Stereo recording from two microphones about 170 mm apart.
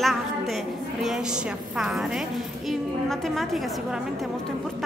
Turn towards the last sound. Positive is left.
turn(degrees=0)  # may be behind; listen again after turning